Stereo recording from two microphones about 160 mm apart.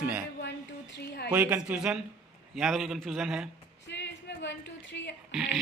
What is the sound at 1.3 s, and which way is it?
Speech, 10° right (ahead or behind).